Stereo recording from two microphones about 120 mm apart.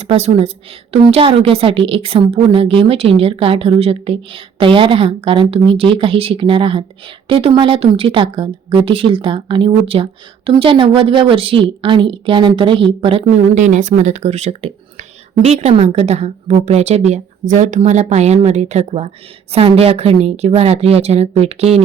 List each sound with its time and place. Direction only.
0.0 s a woman's voice: 60° right (ahead or behind)